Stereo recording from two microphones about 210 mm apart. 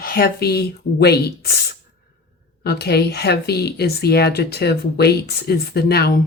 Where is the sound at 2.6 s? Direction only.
50° left (ahead or behind).